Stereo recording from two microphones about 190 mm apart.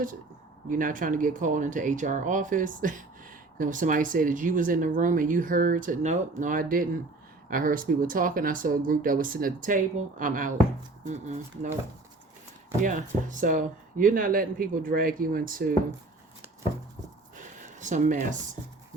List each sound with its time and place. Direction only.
0.7 s speech: 45° right (ahead or behind)
12.8 s speech: 40° right (ahead or behind)
17.3 s a sound: 40° right (ahead or behind)